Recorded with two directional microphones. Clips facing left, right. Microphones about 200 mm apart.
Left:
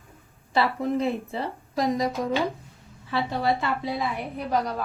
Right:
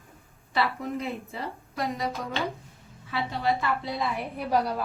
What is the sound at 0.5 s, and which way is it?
A woman's voice, 30° left (ahead or behind).